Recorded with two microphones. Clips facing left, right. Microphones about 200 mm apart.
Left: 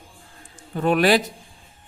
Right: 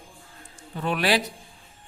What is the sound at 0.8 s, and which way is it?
Speech, 50° left (ahead or behind).